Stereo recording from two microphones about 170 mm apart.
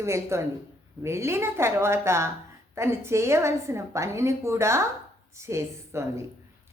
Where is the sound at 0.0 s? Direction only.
15° right (ahead or behind).